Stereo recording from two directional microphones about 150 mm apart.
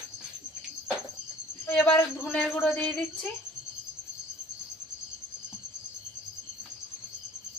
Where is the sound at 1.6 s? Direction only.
10° left (ahead or behind).